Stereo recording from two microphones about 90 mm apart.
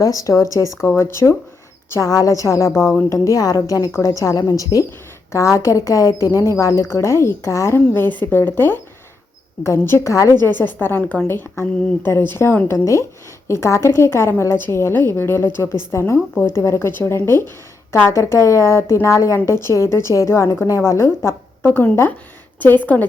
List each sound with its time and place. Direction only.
0.0 s speech: 40° left (ahead or behind)
1.9 s a woman's voice: 40° left (ahead or behind)
10.8 s a woman's voice: 25° left (ahead or behind)
21.7 s a woman's voice: 15° left (ahead or behind)